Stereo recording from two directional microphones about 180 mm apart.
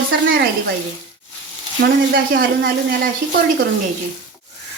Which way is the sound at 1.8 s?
55° right (ahead or behind).